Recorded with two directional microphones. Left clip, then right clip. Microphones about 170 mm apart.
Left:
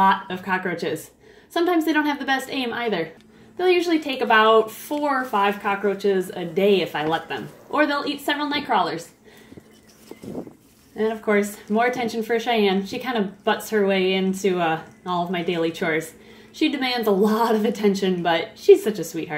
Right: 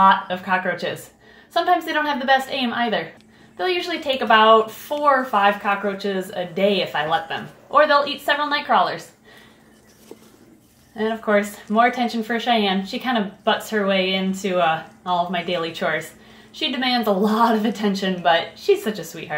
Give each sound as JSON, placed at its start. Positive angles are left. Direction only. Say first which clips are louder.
{"t": 0.0, "sound": "speech", "louder": "right 3 dB", "side_deg": 40}
{"t": 11.0, "sound": "speech", "louder": "right 1 dB", "side_deg": 40}